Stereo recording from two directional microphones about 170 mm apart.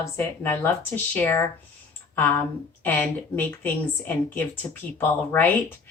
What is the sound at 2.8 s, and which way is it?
A woman's voice, 10° left (ahead or behind).